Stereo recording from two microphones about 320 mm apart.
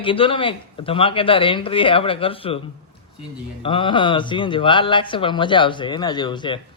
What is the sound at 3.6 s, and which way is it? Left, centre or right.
A man's voice, centre.